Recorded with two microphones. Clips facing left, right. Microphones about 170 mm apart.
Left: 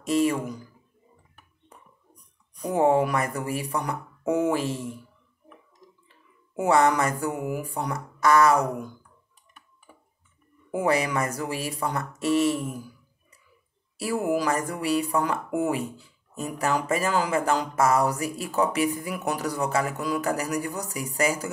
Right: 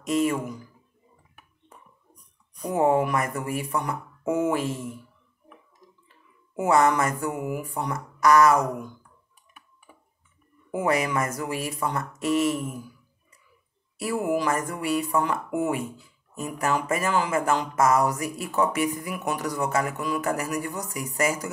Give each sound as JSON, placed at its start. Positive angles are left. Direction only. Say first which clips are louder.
{"t": 0.1, "sound": "speech", "louder": "left 1 dB", "side_deg": 35}
{"t": 2.7, "sound": "speech", "louder": "left 1 dB", "side_deg": 35}
{"t": 6.6, "sound": "speech", "louder": "even", "side_deg": 35}
{"t": 10.8, "sound": "speech", "louder": "even", "side_deg": 35}
{"t": 13.9, "sound": "speech", "louder": "even", "side_deg": 35}